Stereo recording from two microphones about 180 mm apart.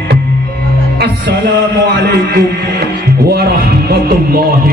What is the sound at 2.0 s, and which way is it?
A man's voice, 60° right (ahead or behind).